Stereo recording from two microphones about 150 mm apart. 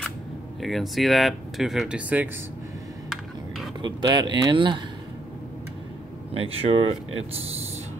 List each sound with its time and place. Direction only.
0.6 s speech: centre (ahead or behind)
3.1 s a sound: centre (ahead or behind)
3.8 s speech: 30° right (ahead or behind)
6.3 s speech: 40° right (ahead or behind)